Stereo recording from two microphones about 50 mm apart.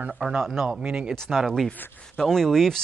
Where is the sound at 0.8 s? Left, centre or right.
Centre.